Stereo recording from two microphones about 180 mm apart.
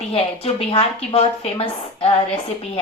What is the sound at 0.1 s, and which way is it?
A woman's voice, 30° left (ahead or behind).